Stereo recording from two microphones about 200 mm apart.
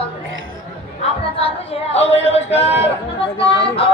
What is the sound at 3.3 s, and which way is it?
Music, 30° left (ahead or behind).